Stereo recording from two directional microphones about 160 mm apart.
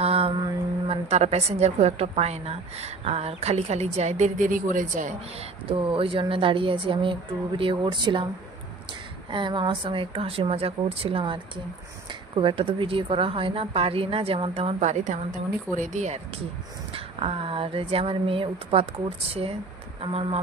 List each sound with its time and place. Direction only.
0.0 s a sound: 40° right (ahead or behind)
0.8 s a woman's voice: 40° right (ahead or behind)
5.7 s speech: 35° right (ahead or behind)
9.3 s speech: 30° right (ahead or behind)
16.9 s speech: 35° right (ahead or behind)